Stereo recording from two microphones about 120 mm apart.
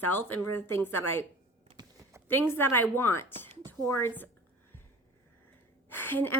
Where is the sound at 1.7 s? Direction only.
35° right (ahead or behind).